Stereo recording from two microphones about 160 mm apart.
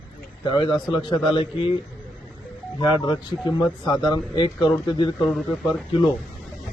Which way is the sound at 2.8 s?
30° left (ahead or behind).